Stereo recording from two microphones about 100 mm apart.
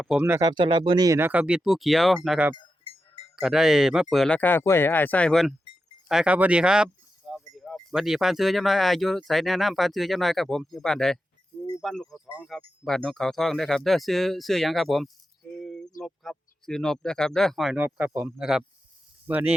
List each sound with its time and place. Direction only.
0.2 s speech: 25° right (ahead or behind)
0.4 s speech: 50° right (ahead or behind)
1.2 s speech: 15° right (ahead or behind)
4.3 s speech: 15° left (ahead or behind)
5.3 s speech: centre (ahead or behind)
6.3 s a sound: 15° right (ahead or behind)
7.9 s speech: 5° right (ahead or behind)
15.6 s a sound: 5° left (ahead or behind)
16.0 s speech: centre (ahead or behind)
17.7 s speech: 15° right (ahead or behind)
18.3 s speech: 5° right (ahead or behind)
19.3 s speech: 15° right (ahead or behind)